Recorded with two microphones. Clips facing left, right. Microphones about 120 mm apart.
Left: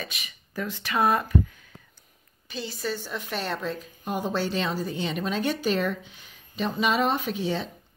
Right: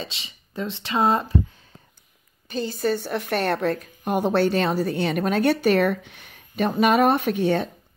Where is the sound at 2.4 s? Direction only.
45° right (ahead or behind).